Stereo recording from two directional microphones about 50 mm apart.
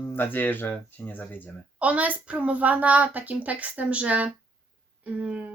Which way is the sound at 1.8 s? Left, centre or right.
Right.